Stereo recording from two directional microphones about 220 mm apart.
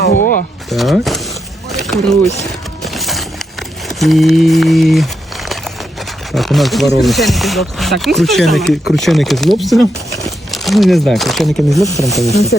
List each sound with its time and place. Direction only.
0.1 s a sound: 35° left (ahead or behind)
0.7 s speech: centre (ahead or behind)
1.7 s a sound: centre (ahead or behind)
2.4 s music: centre (ahead or behind)
3.8 s speech: centre (ahead or behind)
6.3 s speech: centre (ahead or behind)